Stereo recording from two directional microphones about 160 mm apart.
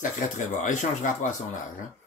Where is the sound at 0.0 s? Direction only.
50° left (ahead or behind).